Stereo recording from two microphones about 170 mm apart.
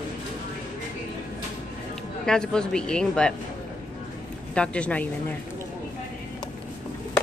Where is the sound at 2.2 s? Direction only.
5° left (ahead or behind).